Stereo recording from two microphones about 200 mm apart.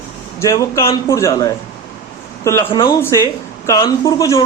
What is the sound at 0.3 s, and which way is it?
A man's voice, 15° left (ahead or behind).